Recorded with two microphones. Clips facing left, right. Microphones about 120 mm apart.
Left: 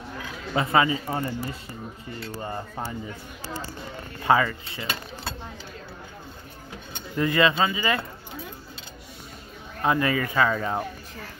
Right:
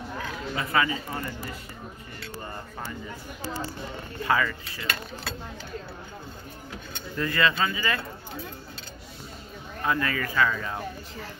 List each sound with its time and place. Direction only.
0.6 s speech: 25° left (ahead or behind)
4.2 s speech: 25° left (ahead or behind)
7.2 s speech: 20° left (ahead or behind)
9.8 s speech: 25° left (ahead or behind)